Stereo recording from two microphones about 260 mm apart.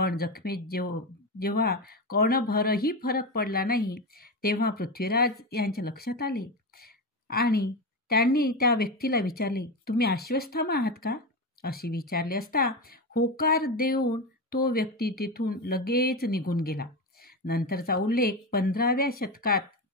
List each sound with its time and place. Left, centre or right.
0.0 s speech: left